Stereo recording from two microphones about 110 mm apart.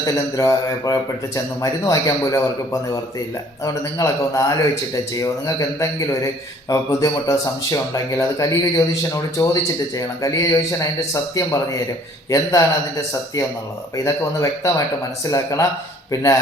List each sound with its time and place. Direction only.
0.0 s speech: 30° left (ahead or behind)
3.6 s speech: 30° left (ahead or behind)